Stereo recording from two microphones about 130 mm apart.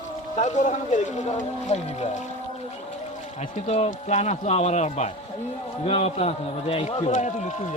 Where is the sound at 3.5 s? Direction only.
55° left (ahead or behind).